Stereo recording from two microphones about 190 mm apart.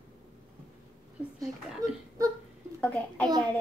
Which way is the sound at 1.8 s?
15° right (ahead or behind).